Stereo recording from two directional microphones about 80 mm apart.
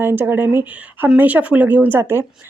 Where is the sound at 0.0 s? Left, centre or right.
Right.